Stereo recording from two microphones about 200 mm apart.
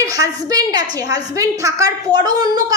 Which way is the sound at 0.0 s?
15° right (ahead or behind).